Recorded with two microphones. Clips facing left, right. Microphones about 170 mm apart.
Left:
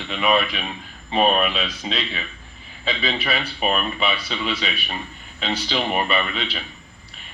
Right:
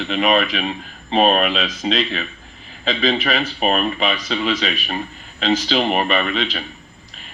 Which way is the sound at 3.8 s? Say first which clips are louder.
Right 4 dB; 40° right (ahead or behind).